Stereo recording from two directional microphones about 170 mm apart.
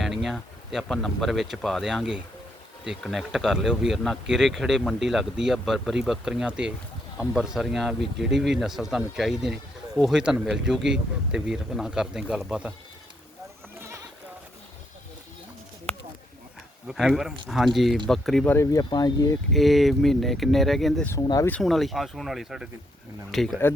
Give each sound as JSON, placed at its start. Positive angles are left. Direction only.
{"t": 0.0, "sound": "speech", "side_deg": 0}
{"t": 13.7, "sound": "sheep", "side_deg": -15}
{"t": 16.8, "sound": "speech", "side_deg": 0}
{"t": 18.5, "sound": "speech", "side_deg": 20}
{"t": 19.5, "sound": "speech", "side_deg": 0}
{"t": 21.1, "sound": "speech", "side_deg": 20}
{"t": 21.5, "sound": "speech", "side_deg": 0}